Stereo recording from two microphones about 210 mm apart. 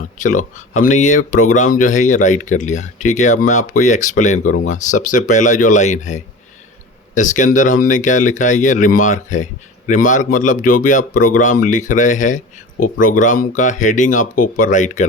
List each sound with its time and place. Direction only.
0.2 s speech: 35° left (ahead or behind)